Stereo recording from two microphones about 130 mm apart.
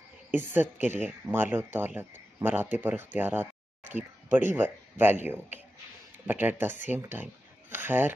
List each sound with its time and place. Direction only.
0.3 s speech: 15° right (ahead or behind)